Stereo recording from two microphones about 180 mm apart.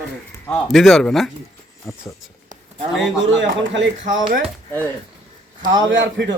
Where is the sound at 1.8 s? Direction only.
15° left (ahead or behind).